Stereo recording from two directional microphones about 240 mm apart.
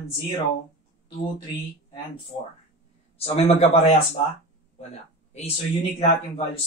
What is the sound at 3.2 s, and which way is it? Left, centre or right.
Speech, left.